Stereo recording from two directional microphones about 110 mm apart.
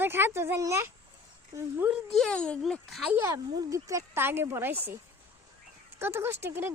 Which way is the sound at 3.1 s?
25° right (ahead or behind).